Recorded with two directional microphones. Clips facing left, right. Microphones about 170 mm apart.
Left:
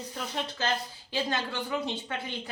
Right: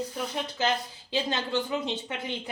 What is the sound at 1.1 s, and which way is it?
Speech, 25° right (ahead or behind).